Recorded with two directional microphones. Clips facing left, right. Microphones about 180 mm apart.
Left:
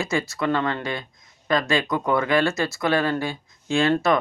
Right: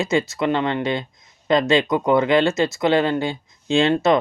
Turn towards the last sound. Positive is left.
turn(degrees=-20)  # may be behind; listen again after turning